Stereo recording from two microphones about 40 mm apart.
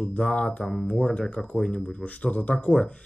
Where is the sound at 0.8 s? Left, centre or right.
Left.